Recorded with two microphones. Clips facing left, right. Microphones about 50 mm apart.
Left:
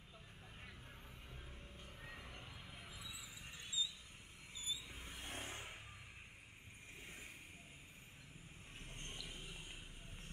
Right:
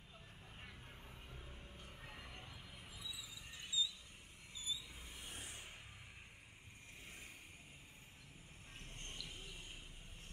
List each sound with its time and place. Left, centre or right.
1.3 s music: centre
3.0 s a sound: left
4.6 s vehicle: left
5.1 s vehicle: left
8.7 s music: centre